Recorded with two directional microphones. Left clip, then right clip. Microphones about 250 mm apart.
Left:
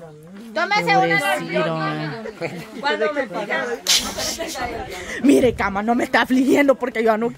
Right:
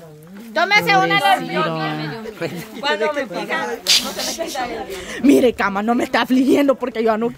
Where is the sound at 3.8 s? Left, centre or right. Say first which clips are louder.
Right 2 dB; centre.